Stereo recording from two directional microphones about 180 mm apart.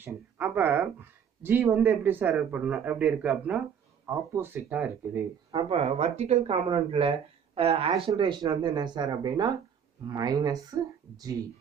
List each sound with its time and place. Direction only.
0.0 s speech: 10° right (ahead or behind)
5.5 s speech: 30° right (ahead or behind)